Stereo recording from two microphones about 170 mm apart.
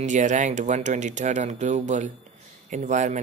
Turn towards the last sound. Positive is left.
turn(degrees=-45)  # may be behind; listen again after turning